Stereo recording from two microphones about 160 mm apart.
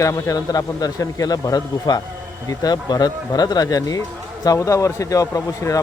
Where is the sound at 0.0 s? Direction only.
20° left (ahead or behind).